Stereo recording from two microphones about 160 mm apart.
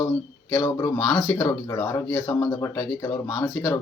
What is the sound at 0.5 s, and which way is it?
Speech, 20° left (ahead or behind).